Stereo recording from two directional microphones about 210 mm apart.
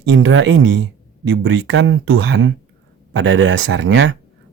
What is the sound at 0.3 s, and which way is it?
Speech, 65° right (ahead or behind).